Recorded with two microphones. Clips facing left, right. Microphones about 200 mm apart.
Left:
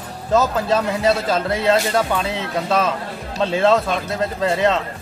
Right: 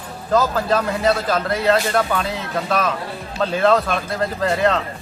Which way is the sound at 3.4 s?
25° left (ahead or behind).